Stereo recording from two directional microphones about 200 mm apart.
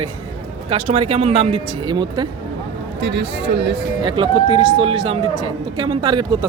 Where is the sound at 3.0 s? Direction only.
60° right (ahead or behind).